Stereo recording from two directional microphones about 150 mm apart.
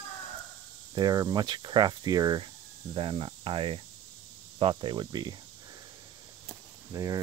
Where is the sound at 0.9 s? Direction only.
25° right (ahead or behind).